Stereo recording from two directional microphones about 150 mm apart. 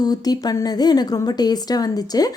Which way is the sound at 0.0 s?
25° left (ahead or behind).